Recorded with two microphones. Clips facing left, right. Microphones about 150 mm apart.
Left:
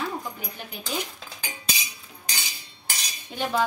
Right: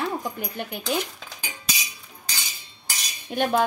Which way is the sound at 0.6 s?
60° right (ahead or behind).